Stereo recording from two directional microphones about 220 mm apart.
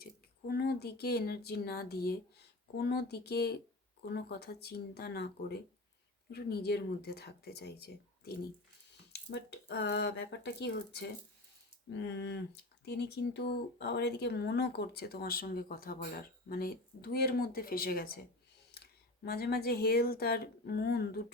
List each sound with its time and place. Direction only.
0.0 s speech: 45° left (ahead or behind)